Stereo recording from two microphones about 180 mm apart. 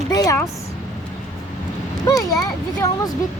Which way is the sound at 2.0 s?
20° left (ahead or behind).